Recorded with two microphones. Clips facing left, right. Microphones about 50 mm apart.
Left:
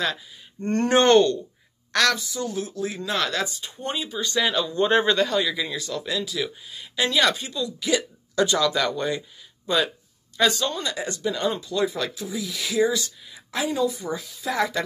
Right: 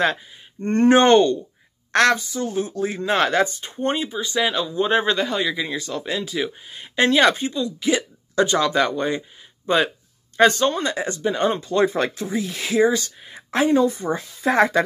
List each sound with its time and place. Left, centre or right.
0.0 s speech: right; by 1.4 s centre
1.9 s speech: right
4.1 s speech: centre
5.6 s speech: right